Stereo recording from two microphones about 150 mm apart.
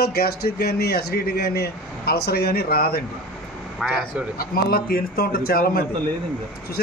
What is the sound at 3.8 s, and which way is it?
Speech, centre (ahead or behind).